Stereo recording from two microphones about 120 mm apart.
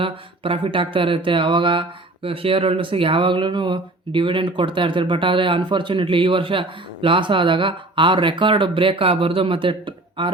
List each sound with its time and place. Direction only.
0.0 s speech: 50° right (ahead or behind)